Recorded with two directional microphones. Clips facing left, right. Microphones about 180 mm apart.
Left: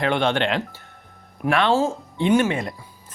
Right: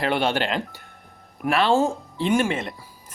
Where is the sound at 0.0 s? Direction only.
5° right (ahead or behind).